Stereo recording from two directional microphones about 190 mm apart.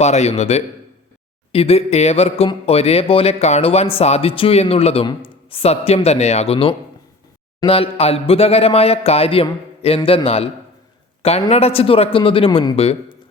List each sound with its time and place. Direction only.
0.0 s a man's voice: 35° left (ahead or behind)